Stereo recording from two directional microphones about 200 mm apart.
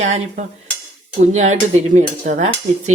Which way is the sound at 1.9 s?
35° right (ahead or behind).